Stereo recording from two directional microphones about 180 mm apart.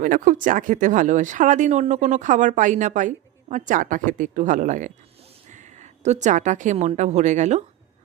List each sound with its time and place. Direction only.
0.0 s a woman's voice: 45° right (ahead or behind)